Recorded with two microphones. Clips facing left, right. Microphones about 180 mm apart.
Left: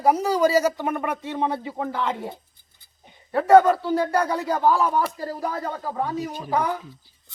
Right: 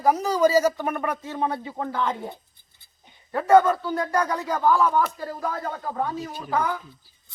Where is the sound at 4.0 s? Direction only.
30° left (ahead or behind).